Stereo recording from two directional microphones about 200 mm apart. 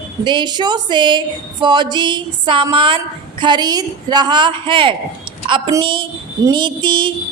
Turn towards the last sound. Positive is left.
turn(degrees=-25)  # may be behind; listen again after turning